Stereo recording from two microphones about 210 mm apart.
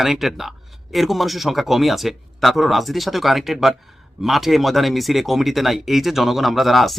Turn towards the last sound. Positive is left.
turn(degrees=0)  # may be behind; listen again after turning